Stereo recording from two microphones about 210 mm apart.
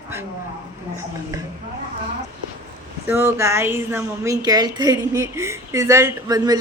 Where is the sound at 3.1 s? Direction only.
10° right (ahead or behind).